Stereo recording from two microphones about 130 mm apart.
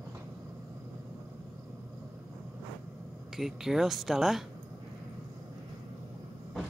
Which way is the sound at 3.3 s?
5° right (ahead or behind).